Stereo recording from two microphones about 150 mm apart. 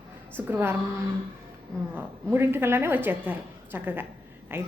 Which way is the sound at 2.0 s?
15° right (ahead or behind).